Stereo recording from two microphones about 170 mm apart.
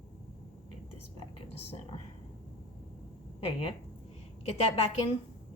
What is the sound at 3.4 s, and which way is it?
Speech, 30° left (ahead or behind).